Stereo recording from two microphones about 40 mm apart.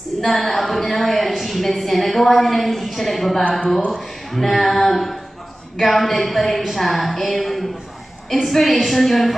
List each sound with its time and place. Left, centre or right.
0.2 s a woman's voice: centre